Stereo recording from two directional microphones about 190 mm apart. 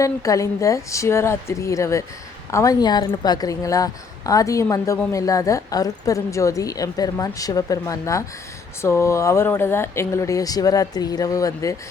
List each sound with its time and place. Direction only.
0.0 s a woman's voice: 15° left (ahead or behind)